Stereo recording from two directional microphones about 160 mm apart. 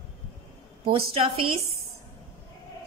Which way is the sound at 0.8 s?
35° right (ahead or behind).